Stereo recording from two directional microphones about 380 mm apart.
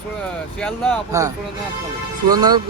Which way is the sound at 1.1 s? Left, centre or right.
Centre.